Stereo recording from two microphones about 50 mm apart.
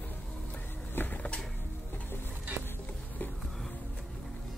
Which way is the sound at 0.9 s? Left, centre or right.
Left.